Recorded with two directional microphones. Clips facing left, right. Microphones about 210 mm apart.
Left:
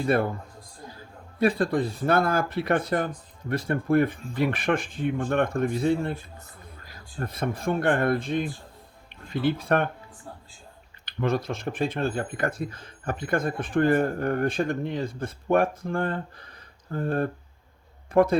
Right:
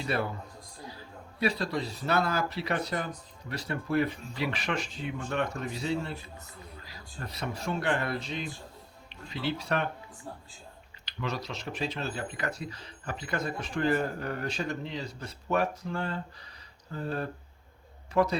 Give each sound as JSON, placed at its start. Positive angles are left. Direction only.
{"t": 0.0, "sound": "a man's voice", "side_deg": 50}
{"t": 11.0, "sound": "speech", "side_deg": 50}